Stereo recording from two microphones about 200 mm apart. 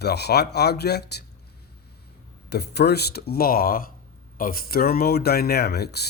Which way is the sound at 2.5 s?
55° left (ahead or behind).